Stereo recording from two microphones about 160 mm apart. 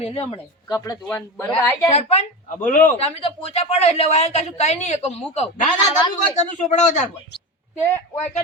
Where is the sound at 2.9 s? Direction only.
35° left (ahead or behind).